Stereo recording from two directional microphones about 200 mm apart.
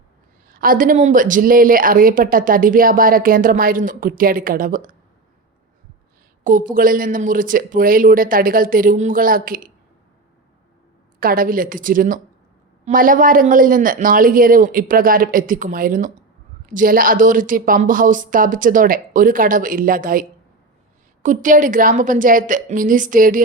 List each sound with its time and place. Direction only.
0.4 s a woman's voice: 45° right (ahead or behind)
6.4 s a woman's voice: 45° right (ahead or behind)
11.2 s a woman's voice: 45° right (ahead or behind)